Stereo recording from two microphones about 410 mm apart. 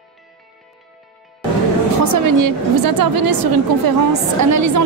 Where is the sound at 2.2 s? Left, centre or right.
Right.